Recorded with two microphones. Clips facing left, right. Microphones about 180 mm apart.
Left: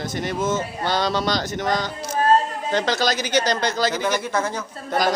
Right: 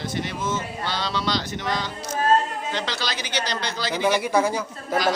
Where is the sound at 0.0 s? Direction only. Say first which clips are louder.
Left 4 dB; 45° left (ahead or behind).